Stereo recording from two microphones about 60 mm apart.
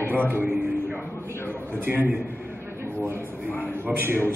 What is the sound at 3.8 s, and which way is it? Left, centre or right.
Speech, right.